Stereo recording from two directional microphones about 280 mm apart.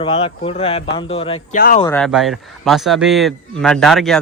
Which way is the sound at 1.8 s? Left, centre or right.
Centre.